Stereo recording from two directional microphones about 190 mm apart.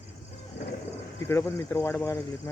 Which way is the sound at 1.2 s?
15° left (ahead or behind).